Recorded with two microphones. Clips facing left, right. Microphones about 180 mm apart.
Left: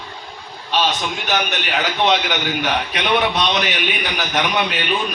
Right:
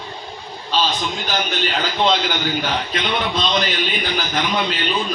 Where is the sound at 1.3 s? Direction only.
70° left (ahead or behind).